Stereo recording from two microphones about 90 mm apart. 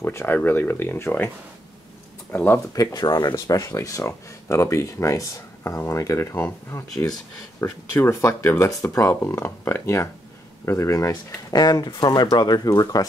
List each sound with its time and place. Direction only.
0.0 s speech: 25° left (ahead or behind)
2.3 s speech: 25° left (ahead or behind)
2.7 s speech: 45° left (ahead or behind)